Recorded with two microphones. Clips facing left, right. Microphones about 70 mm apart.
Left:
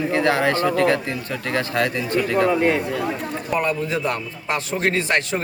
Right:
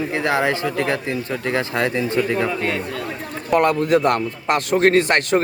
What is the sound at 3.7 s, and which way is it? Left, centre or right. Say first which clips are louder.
A man's voice: right 6 dB; right.